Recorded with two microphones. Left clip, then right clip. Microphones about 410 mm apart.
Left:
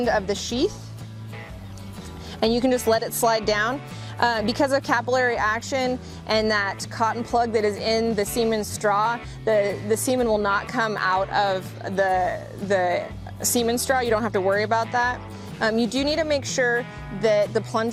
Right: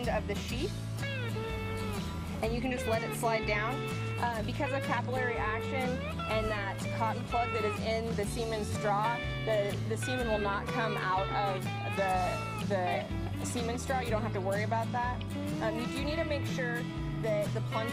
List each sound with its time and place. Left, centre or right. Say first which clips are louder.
2.4 s speech: left 13 dB; left
12.7 s speech: left 11 dB; left